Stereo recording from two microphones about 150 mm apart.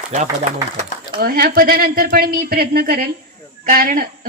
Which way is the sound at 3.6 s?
70° right (ahead or behind).